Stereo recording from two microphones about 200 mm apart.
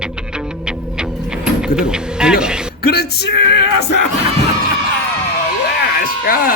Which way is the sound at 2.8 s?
50° left (ahead or behind).